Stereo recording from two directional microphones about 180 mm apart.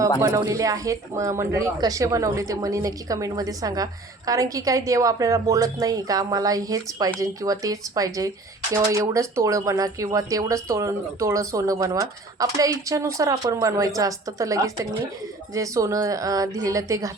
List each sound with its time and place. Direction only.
0.2 s speech: 20° right (ahead or behind)